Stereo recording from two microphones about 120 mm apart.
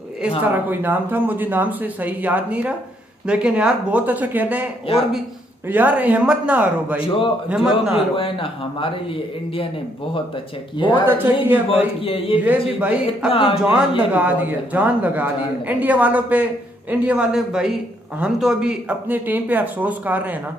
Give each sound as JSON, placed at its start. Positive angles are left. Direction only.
{"t": 0.4, "sound": "speech", "side_deg": -15}
{"t": 5.7, "sound": "speech", "side_deg": -15}
{"t": 7.0, "sound": "speech", "side_deg": 45}
{"t": 7.4, "sound": "speech", "side_deg": -5}
{"t": 8.2, "sound": "speech", "side_deg": 45}
{"t": 10.8, "sound": "speech", "side_deg": 45}
{"t": 11.1, "sound": "speech", "side_deg": -15}
{"t": 12.0, "sound": "speech", "side_deg": 50}
{"t": 12.4, "sound": "speech", "side_deg": -15}
{"t": 13.3, "sound": "speech", "side_deg": 50}
{"t": 13.6, "sound": "speech", "side_deg": -10}